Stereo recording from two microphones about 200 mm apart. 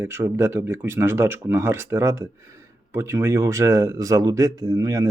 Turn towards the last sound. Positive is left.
turn(degrees=-15)  # may be behind; listen again after turning